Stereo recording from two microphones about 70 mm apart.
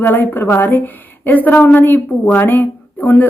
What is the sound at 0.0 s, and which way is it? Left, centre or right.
A woman's voice, left.